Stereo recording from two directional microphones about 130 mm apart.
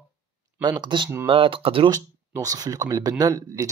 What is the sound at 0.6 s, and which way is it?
Speech, 35° right (ahead or behind).